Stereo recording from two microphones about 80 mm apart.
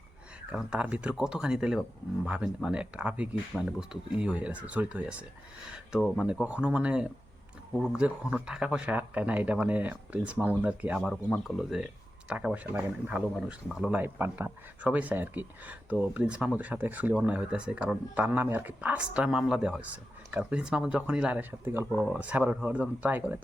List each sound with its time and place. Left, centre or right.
0.5 s speech: centre
2.7 s speech: centre
6.4 s speech: centre
11.0 s speech: centre
12.6 s speech: right
13.1 s speech: centre
14.0 s speech: right
21.6 s speech: right
22.0 s speech: centre